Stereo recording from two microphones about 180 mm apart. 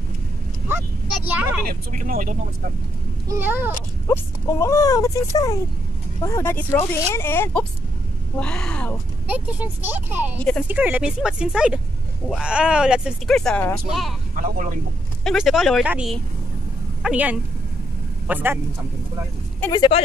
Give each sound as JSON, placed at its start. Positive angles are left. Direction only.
{"t": 1.7, "sound": "speech", "side_deg": -50}
{"t": 3.3, "sound": "speech", "side_deg": -10}
{"t": 4.1, "sound": "speech", "side_deg": 15}
{"t": 9.3, "sound": "speech", "side_deg": -10}
{"t": 14.3, "sound": "speech", "side_deg": -45}
{"t": 15.2, "sound": "a man's voice", "side_deg": 0}
{"t": 19.7, "sound": "speech", "side_deg": 25}